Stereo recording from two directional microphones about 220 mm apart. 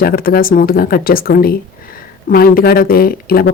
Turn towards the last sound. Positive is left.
turn(degrees=45)  # may be behind; listen again after turning